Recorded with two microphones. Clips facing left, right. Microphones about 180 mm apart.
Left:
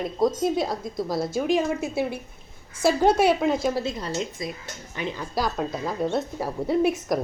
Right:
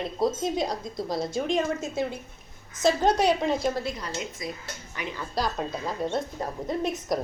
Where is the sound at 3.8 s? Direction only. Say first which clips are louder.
Left 4 dB; 30° left (ahead or behind).